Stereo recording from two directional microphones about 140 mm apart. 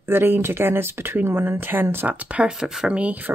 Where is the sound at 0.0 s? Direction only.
15° right (ahead or behind).